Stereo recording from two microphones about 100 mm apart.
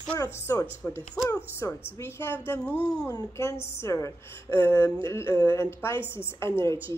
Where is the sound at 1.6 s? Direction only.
25° left (ahead or behind).